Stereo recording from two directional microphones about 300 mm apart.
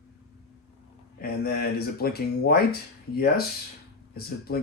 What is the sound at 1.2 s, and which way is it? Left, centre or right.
Speech, left.